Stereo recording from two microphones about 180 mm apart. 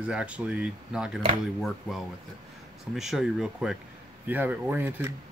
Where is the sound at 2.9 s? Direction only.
Centre (ahead or behind).